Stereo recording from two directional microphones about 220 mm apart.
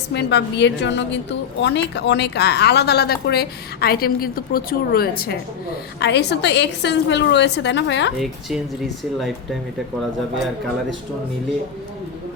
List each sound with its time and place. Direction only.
0.1 s a woman's voice: 50° left (ahead or behind)
8.2 s speech: centre (ahead or behind)